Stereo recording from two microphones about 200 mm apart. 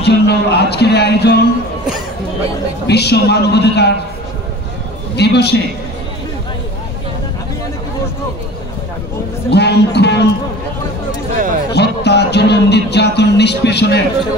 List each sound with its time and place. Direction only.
0.0 s music: 55° left (ahead or behind)
2.9 s music: 55° left (ahead or behind)
5.1 s music: 55° left (ahead or behind)
9.5 s music: 55° left (ahead or behind)
11.1 s a sound: 40° right (ahead or behind)
11.7 s music: 55° left (ahead or behind)